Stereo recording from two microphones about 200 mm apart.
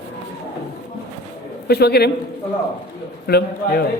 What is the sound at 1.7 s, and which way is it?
Speech, 55° left (ahead or behind).